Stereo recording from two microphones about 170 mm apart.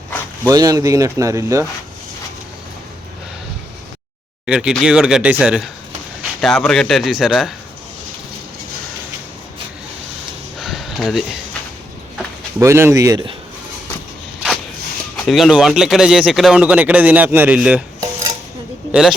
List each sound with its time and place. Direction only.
0.4 s speech: 20° right (ahead or behind)
4.4 s speech: 5° right (ahead or behind)
10.6 s a sound: centre (ahead or behind)
12.5 s speech: 15° right (ahead or behind)
15.1 s speech: centre (ahead or behind)
18.9 s a man's voice: 5° right (ahead or behind)